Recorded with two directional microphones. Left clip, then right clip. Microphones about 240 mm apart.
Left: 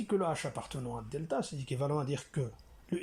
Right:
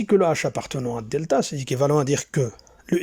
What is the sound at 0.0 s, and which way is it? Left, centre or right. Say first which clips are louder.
Speech: right 14 dB; right.